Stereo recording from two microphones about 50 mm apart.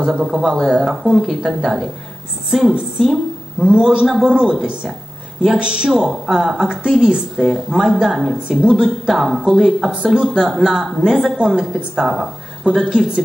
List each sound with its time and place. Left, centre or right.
0.0 s a woman's voice: centre
3.5 s a man's voice: centre